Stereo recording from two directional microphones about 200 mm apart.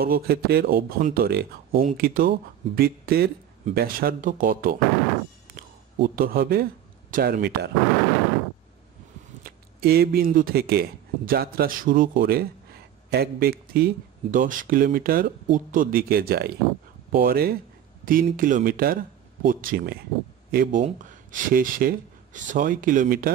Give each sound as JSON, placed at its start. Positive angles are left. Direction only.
{"t": 0.0, "sound": "speech", "side_deg": -50}
{"t": 6.0, "sound": "speech", "side_deg": -45}
{"t": 9.4, "sound": "speech", "side_deg": -50}